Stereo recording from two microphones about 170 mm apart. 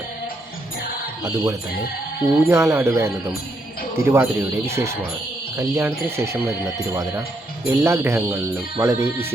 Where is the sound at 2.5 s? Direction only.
15° right (ahead or behind).